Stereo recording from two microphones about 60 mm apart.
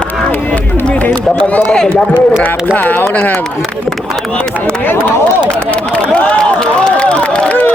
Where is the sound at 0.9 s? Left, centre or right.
Left.